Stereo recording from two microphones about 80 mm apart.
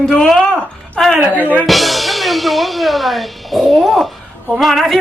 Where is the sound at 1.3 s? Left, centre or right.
Left.